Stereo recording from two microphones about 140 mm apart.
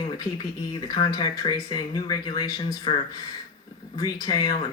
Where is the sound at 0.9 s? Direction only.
30° left (ahead or behind).